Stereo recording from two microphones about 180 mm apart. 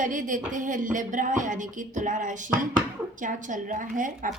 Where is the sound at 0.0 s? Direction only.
45° right (ahead or behind).